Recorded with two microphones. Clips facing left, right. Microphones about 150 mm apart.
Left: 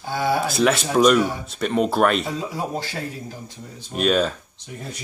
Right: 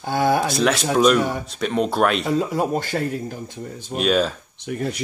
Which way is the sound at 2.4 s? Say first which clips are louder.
Right 6 dB; 55° right (ahead or behind).